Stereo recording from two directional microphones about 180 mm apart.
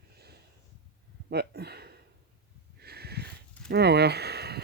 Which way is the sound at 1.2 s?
65° right (ahead or behind).